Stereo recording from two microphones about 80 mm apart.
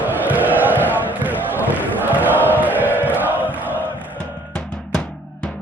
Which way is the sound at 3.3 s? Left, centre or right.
Left.